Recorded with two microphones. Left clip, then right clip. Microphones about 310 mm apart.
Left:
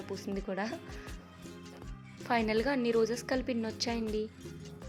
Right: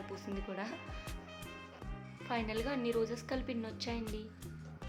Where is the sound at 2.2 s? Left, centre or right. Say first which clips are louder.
Left 8 dB; left.